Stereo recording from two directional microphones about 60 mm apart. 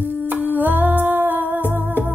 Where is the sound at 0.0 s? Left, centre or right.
Right.